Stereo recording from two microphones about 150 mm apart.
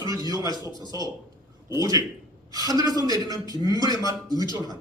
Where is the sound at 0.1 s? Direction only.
25° right (ahead or behind).